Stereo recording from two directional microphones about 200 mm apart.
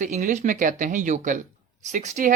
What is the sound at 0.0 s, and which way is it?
Speech, 40° right (ahead or behind).